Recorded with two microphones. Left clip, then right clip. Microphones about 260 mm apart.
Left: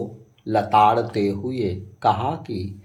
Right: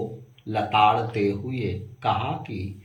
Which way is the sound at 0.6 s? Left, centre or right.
Centre.